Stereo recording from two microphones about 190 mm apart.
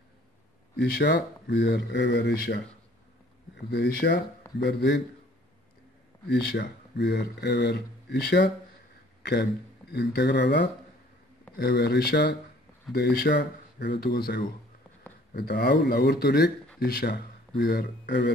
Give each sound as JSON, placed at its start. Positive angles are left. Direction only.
{"t": 0.7, "sound": "speech", "side_deg": 65}
{"t": 6.2, "sound": "a man's voice", "side_deg": 65}